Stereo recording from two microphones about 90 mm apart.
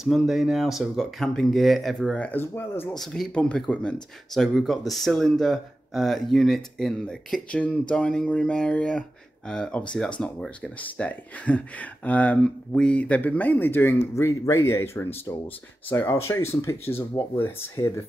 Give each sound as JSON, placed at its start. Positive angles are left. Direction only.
{"t": 0.0, "sound": "speech", "side_deg": 0}
{"t": 2.4, "sound": "speech", "side_deg": 25}
{"t": 3.0, "sound": "speech", "side_deg": 5}